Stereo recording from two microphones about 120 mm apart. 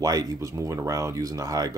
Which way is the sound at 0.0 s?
30° right (ahead or behind).